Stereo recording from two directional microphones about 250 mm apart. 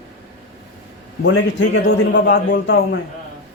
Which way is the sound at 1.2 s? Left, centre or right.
Left.